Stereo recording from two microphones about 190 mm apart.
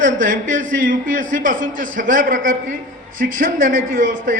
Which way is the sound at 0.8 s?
45° right (ahead or behind).